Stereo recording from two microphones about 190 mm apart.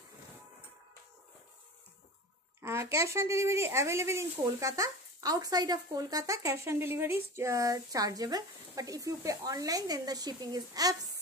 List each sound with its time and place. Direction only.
2.6 s speech: 15° right (ahead or behind)